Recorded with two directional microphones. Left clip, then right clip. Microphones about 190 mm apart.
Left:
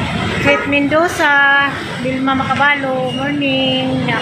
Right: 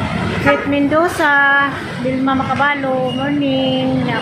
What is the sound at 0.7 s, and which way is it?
A woman's voice, 15° right (ahead or behind).